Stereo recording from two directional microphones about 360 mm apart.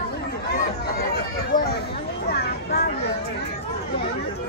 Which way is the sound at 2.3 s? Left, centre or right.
Left.